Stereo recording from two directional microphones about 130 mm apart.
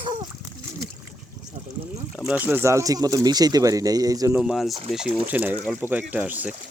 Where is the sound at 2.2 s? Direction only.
10° right (ahead or behind); by 4.3 s 30° right (ahead or behind).